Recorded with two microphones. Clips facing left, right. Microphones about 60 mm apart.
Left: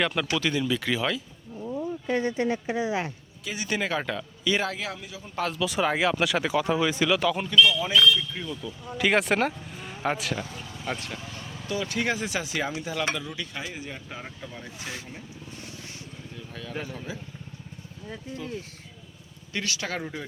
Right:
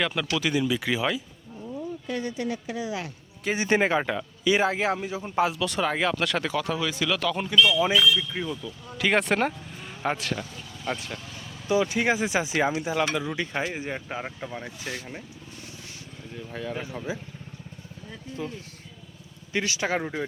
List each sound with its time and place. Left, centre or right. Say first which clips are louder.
0.0 s speech: left 1 dB; centre
0.3 s speech: right 3 dB; centre
1.6 s speech: left 3 dB; left
3.4 s speech: right 6 dB; right
4.0 s speech: right 3 dB; centre; by 5.4 s right
5.4 s speech: right 1 dB; centre
6.7 s speech: left 3 dB; left
7.1 s speech: left 2 dB; centre
7.4 s speech: right 3 dB; centre
8.6 s speech: left 5 dB; centre
11.7 s speech: right 5 dB; centre
14.8 s speech: even; left
16.5 s speech: right 3 dB; centre
19.5 s speech: right 4 dB; right